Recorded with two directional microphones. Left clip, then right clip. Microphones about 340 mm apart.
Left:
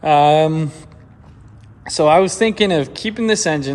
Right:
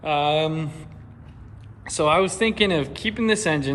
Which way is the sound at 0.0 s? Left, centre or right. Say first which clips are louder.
Left 9 dB; left.